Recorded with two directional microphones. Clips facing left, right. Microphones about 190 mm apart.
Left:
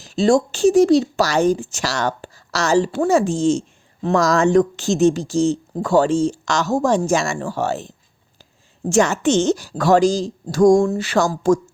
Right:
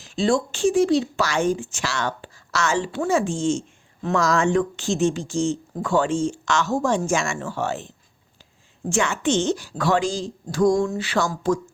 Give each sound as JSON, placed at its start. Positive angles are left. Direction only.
{"t": 0.0, "sound": "speech", "side_deg": 40}